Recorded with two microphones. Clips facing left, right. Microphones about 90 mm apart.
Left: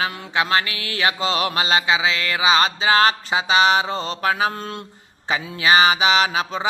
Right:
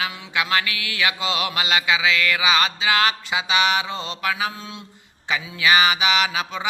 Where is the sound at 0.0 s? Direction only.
35° left (ahead or behind).